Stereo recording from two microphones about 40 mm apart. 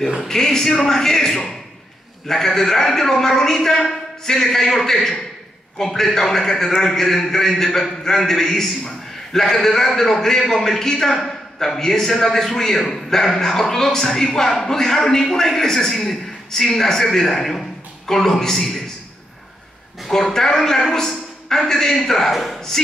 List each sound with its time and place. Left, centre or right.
0.3 s a man's voice: centre
20.1 s a man's voice: centre
22.3 s speech: centre